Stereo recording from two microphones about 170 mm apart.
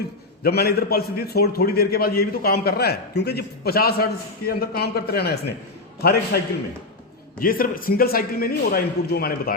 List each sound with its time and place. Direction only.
0.4 s a man's voice: 65° left (ahead or behind)